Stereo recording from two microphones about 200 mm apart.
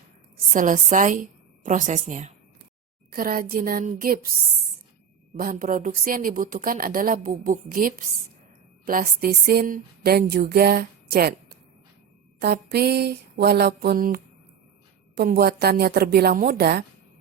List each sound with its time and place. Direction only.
0.5 s a woman's voice: 40° right (ahead or behind)
5.4 s speech: 45° right (ahead or behind)
12.4 s speech: 55° right (ahead or behind)